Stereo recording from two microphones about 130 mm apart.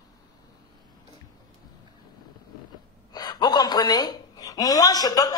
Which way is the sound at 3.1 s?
30° left (ahead or behind).